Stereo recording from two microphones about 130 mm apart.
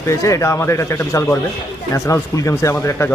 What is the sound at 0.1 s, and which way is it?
Speech, 25° left (ahead or behind).